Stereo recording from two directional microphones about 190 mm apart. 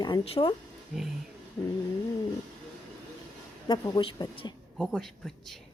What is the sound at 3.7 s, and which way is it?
Speech, 25° left (ahead or behind).